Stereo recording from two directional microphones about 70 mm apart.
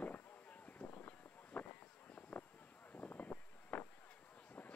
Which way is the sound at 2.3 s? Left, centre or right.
Left.